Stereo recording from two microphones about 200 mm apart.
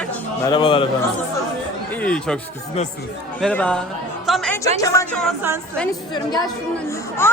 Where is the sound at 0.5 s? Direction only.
25° left (ahead or behind).